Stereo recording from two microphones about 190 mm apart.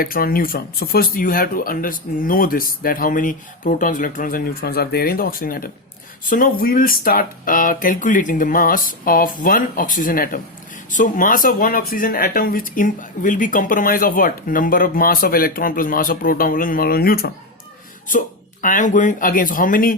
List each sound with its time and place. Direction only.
0.0 s speech: 50° left (ahead or behind)
18.6 s speech: 40° left (ahead or behind)